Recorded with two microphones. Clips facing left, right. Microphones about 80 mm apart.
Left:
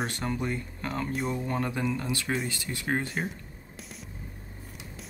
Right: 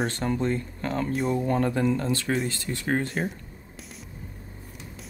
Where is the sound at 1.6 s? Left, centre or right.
Centre.